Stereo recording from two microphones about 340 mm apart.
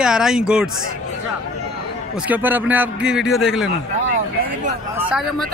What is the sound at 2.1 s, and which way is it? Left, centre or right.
Speech, centre.